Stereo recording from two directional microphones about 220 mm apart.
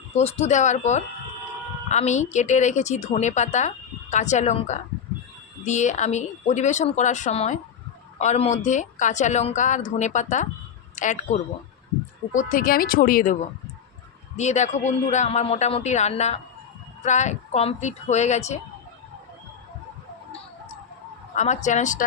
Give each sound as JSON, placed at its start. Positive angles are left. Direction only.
{"t": 0.1, "sound": "a woman's voice", "side_deg": 30}
{"t": 14.3, "sound": "a woman's voice", "side_deg": 30}
{"t": 21.3, "sound": "a woman's voice", "side_deg": 35}